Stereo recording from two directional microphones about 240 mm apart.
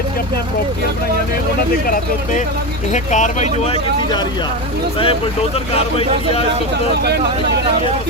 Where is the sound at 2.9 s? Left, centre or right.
Left.